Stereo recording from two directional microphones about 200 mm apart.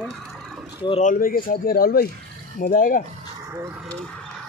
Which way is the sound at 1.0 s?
45° left (ahead or behind).